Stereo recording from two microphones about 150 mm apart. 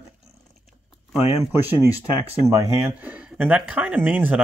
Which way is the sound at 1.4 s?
15° right (ahead or behind).